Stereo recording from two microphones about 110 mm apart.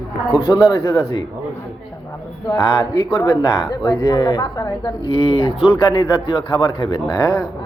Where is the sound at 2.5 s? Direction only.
40° left (ahead or behind).